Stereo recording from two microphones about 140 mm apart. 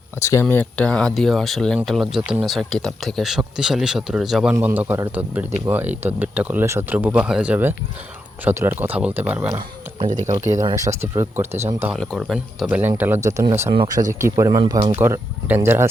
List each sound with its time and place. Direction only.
0.2 s speech: 20° left (ahead or behind)
0.5 s speech: 10° left (ahead or behind); by 9.5 s 10° right (ahead or behind)
10.8 s speech: 20° right (ahead or behind)
11.9 s speech: centre (ahead or behind)
12.6 s speech: 10° right (ahead or behind)
13.2 s speech: 20° right (ahead or behind)
13.8 s speech: 65° right (ahead or behind)
14.1 s speech: 20° right (ahead or behind)
14.6 s speech: 35° right (ahead or behind)
14.9 s speech: 15° right (ahead or behind)